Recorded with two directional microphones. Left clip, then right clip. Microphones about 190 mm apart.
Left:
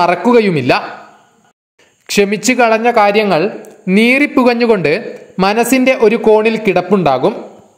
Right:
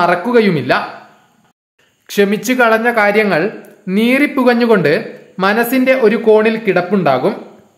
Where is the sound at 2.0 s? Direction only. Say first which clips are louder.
Left 2 dB; 25° left (ahead or behind).